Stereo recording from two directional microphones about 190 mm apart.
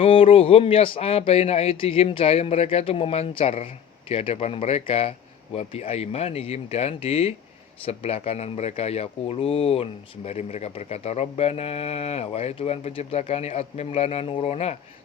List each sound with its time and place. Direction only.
0.0 s speech: 30° left (ahead or behind)